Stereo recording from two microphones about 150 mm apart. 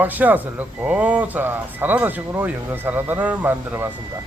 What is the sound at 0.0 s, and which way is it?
Speech, 10° right (ahead or behind).